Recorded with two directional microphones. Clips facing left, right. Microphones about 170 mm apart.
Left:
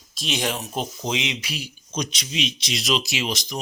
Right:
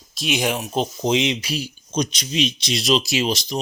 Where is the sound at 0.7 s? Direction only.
30° right (ahead or behind).